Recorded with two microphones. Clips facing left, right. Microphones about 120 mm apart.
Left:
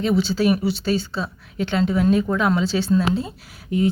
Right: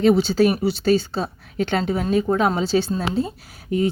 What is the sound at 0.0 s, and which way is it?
Speech, 50° right (ahead or behind).